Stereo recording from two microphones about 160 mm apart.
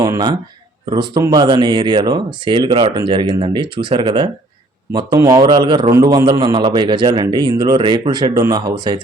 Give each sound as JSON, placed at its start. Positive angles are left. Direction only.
{"t": 0.0, "sound": "speech", "side_deg": -25}